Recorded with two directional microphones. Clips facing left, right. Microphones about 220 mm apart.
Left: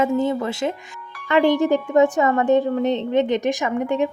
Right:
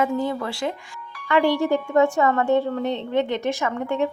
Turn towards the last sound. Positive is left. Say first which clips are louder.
# left 3 dB
turn(degrees=15)  # may be behind; listen again after turning